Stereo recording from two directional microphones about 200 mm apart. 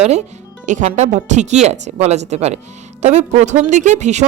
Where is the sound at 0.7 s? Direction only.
35° right (ahead or behind).